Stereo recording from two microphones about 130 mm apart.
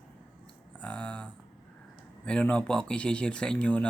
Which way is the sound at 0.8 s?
10° left (ahead or behind).